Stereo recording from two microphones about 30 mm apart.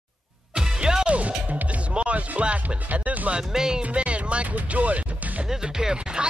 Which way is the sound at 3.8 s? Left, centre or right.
Right.